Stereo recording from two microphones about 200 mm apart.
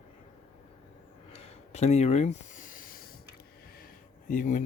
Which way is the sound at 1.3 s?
35° left (ahead or behind).